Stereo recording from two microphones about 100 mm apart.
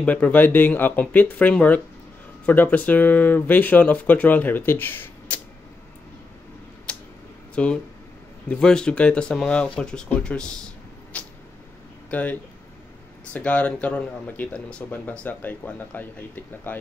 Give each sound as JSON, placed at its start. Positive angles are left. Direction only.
{"t": 0.0, "sound": "speech", "side_deg": 15}
{"t": 6.9, "sound": "tick-tock", "side_deg": 10}
{"t": 7.5, "sound": "speech", "side_deg": 10}
{"t": 11.1, "sound": "cat", "side_deg": 10}
{"t": 12.1, "sound": "speech", "side_deg": 15}